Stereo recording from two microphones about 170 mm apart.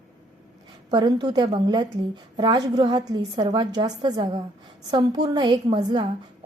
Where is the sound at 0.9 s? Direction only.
25° right (ahead or behind).